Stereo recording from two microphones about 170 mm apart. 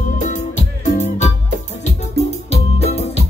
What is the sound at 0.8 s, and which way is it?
Music, 45° left (ahead or behind).